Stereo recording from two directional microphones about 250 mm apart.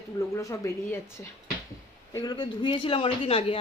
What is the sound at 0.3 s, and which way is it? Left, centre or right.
Speech, centre.